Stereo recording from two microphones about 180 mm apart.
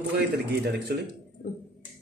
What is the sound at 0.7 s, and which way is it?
Speech, 70° right (ahead or behind).